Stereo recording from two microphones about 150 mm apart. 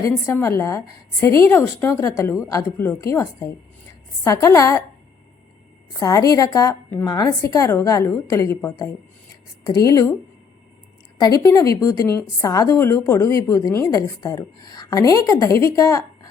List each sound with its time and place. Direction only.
0.0 s a woman's voice: 20° left (ahead or behind)
6.0 s a woman's voice: 25° left (ahead or behind)
11.2 s a woman's voice: 25° left (ahead or behind)